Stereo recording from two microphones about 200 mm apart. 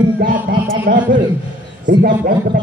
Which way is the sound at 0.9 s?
45° right (ahead or behind).